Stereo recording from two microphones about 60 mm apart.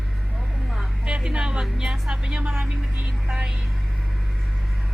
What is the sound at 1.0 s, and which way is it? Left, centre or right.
Speech, centre.